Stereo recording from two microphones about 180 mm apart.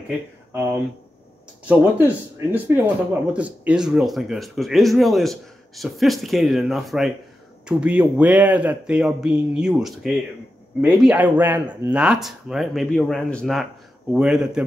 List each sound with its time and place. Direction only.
0.5 s speech: 15° right (ahead or behind)